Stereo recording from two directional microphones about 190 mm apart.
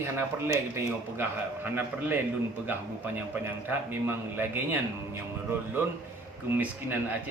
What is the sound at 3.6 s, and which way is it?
A man's voice, 10° right (ahead or behind).